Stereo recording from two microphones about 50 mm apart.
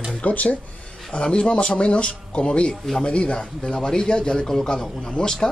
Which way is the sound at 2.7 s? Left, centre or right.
Centre.